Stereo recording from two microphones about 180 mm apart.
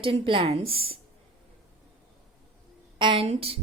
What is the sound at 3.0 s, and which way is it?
Speech, 30° right (ahead or behind).